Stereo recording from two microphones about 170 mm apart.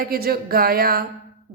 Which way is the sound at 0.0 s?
65° right (ahead or behind).